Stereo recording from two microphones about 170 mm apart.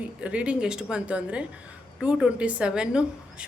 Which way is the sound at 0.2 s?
5° right (ahead or behind).